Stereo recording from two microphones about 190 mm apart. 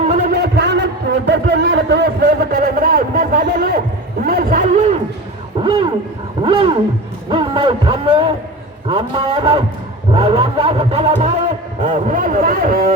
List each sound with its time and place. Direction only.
0.0 s a sound: 40° right (ahead or behind)
0.3 s a sound: 60° right (ahead or behind)
4.2 s speech: 50° right (ahead or behind)
5.6 s a man's voice: 25° right (ahead or behind)
10.1 s vehicle: 30° right (ahead or behind)
11.8 s speech: 40° right (ahead or behind)